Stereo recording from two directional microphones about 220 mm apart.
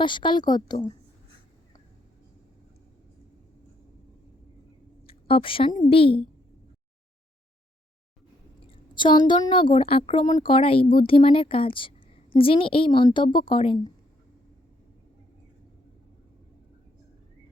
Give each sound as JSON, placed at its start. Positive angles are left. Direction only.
{"t": 0.0, "sound": "a woman's voice", "side_deg": 20}
{"t": 5.0, "sound": "a sound", "side_deg": 25}
{"t": 5.7, "sound": "a woman's voice", "side_deg": 30}
{"t": 8.6, "sound": "a woman's voice", "side_deg": 20}